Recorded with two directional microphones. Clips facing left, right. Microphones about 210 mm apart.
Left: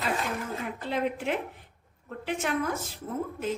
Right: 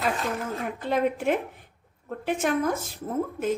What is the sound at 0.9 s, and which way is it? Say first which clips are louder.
Speech: right 5 dB; 50° right (ahead or behind).